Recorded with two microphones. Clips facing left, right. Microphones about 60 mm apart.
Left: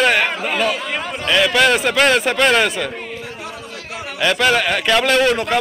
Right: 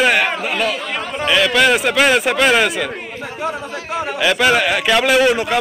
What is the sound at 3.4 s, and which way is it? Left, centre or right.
Chatter, right.